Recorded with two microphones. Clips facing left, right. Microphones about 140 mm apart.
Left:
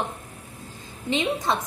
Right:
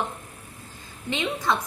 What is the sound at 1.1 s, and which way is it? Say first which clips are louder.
Speech: left 2 dB; 25° left (ahead or behind).